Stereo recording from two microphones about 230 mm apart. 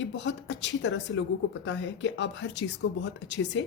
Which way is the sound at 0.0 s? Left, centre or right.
Left.